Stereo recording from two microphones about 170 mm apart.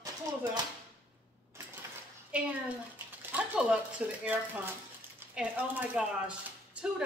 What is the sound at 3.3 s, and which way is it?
Speech, 5° right (ahead or behind).